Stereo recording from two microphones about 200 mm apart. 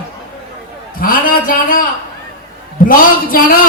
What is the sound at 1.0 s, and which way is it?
Speech, 45° left (ahead or behind).